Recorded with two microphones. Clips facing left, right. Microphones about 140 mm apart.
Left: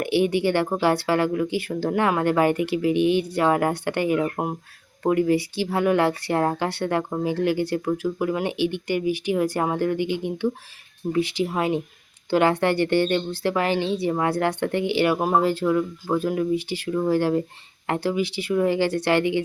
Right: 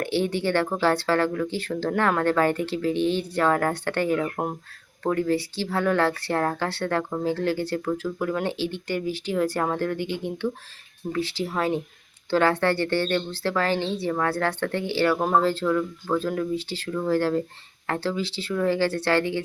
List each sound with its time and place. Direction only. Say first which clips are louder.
0.0 s speech: left 4 dB; 15° left (ahead or behind)